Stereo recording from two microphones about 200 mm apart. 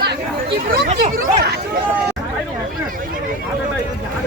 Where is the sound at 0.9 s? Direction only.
40° right (ahead or behind).